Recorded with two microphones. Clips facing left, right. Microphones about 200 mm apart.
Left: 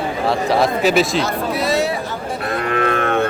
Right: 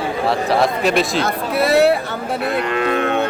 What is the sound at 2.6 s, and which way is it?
Moo, 50° left (ahead or behind).